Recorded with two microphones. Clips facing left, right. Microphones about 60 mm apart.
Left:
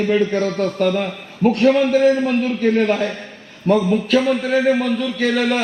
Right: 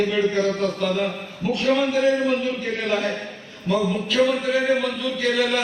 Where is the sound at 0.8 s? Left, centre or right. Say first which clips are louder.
Left 4 dB; left.